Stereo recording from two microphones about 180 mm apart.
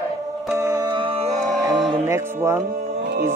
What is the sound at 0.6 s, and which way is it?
Music, 20° right (ahead or behind).